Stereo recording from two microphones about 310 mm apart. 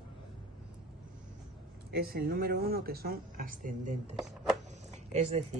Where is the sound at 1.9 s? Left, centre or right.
Right.